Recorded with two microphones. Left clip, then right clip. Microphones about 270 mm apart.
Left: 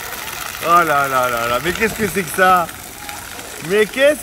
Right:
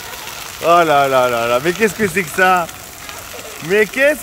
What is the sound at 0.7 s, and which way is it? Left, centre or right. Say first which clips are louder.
Speech: right 2 dB; right.